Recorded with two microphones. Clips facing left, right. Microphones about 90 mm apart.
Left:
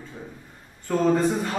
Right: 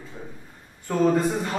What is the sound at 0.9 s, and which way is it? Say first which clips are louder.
Speech: even; 5° right (ahead or behind).